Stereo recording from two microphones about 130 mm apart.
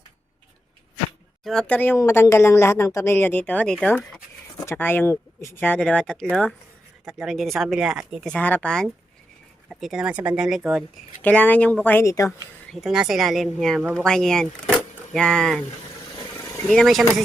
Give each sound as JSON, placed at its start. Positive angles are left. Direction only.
{"t": 1.5, "sound": "speech", "side_deg": 5}
{"t": 4.5, "sound": "speech", "side_deg": 20}
{"t": 7.0, "sound": "speech", "side_deg": -5}
{"t": 11.2, "sound": "speech", "side_deg": 10}
{"t": 12.7, "sound": "speech", "side_deg": -5}
{"t": 16.6, "sound": "speech", "side_deg": 0}